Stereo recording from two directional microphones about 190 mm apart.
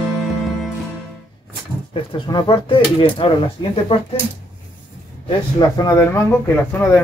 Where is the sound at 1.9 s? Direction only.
25° left (ahead or behind).